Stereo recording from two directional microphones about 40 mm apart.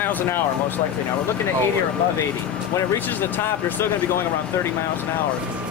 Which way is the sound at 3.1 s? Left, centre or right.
Left.